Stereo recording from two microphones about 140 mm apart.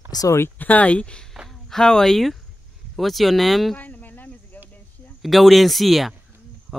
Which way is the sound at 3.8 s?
10° left (ahead or behind).